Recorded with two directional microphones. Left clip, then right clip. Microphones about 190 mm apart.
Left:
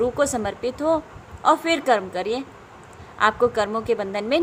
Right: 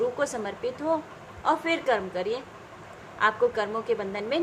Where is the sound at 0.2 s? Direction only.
35° left (ahead or behind).